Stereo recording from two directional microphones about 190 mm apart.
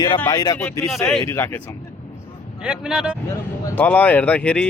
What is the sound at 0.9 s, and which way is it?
Speech, centre (ahead or behind).